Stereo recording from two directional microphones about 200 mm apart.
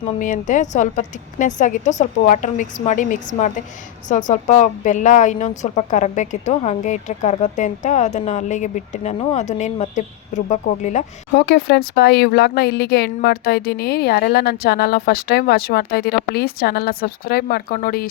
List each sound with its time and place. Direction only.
0.2 s speech: 40° left (ahead or behind)
11.3 s speech: 55° left (ahead or behind)